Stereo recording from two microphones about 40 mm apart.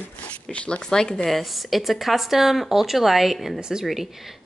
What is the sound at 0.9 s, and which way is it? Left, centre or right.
Speech, centre.